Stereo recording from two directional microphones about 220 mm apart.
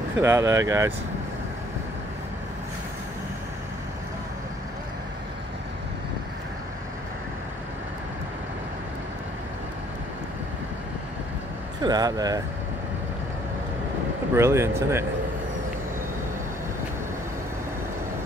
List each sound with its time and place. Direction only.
0.2 s speech: 15° right (ahead or behind)
11.8 s speech: 15° right (ahead or behind)
14.3 s speech: 10° right (ahead or behind)